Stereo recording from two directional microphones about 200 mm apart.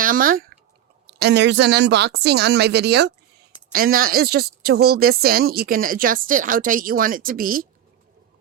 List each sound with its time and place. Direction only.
0.0 s speech: 45° right (ahead or behind)
1.2 s a woman's voice: 60° right (ahead or behind)